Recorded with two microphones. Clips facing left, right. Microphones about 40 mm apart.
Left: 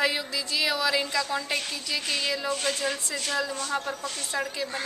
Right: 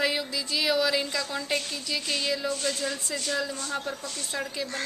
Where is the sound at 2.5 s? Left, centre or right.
Left.